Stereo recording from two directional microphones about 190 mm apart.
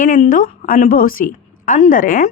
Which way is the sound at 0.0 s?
45° left (ahead or behind).